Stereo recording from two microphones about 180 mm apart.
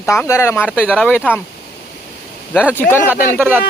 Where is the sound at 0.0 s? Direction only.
15° left (ahead or behind).